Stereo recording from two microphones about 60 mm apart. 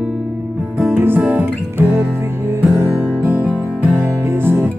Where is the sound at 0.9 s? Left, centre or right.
Right.